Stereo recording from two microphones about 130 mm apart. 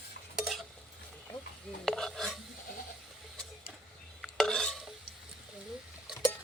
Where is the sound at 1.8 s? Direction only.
Centre (ahead or behind).